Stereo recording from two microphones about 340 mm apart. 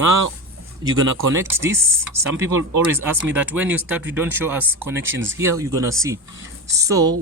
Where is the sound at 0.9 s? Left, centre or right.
Right.